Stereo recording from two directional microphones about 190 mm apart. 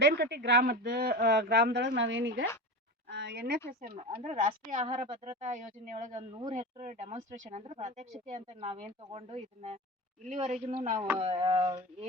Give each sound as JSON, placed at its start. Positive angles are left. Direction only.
{"t": 0.0, "sound": "speech", "side_deg": -60}
{"t": 2.0, "sound": "a woman's voice", "side_deg": -75}
{"t": 3.7, "sound": "speech", "side_deg": -50}
{"t": 3.9, "sound": "speech", "side_deg": -35}
{"t": 10.9, "sound": "speech", "side_deg": -10}
{"t": 11.2, "sound": "speech", "side_deg": -30}